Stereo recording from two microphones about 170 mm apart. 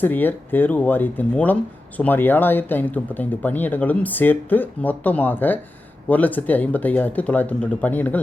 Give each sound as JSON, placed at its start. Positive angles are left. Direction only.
{"t": 0.0, "sound": "speech", "side_deg": 10}